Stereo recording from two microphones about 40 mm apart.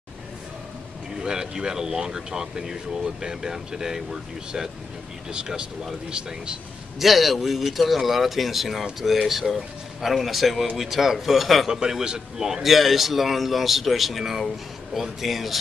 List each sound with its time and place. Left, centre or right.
1.2 s speech: centre
6.0 s speech: right
7.0 s a man's voice: centre
11.6 s speech: centre
12.6 s a man's voice: centre